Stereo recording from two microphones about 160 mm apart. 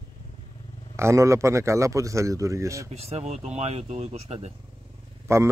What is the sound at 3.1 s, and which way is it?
Speech, 45° right (ahead or behind).